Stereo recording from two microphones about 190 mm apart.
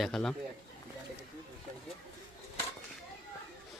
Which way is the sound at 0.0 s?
5° left (ahead or behind).